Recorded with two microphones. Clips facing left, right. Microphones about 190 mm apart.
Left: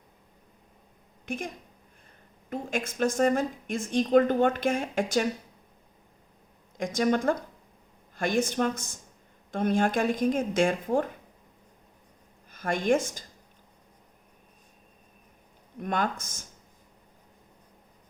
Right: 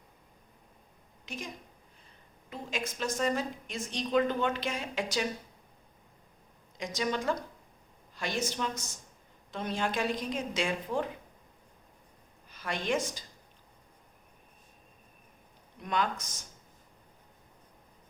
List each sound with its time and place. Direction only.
1.2 s a woman's voice: 55° left (ahead or behind)
2.5 s a woman's voice: 50° left (ahead or behind)
6.7 s a woman's voice: 50° left (ahead or behind)
12.5 s speech: 50° left (ahead or behind)
15.8 s speech: 50° left (ahead or behind)